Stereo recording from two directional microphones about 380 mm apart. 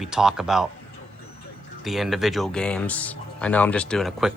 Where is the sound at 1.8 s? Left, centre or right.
Centre.